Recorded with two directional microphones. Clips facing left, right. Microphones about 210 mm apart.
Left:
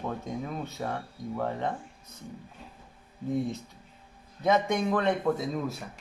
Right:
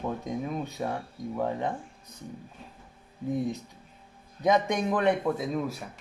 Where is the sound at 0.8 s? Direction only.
20° right (ahead or behind).